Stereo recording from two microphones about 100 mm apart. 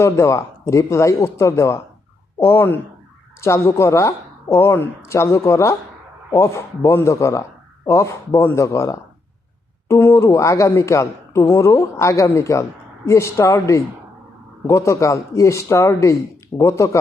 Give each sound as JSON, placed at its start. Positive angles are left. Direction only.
{"t": 0.0, "sound": "speech", "side_deg": 25}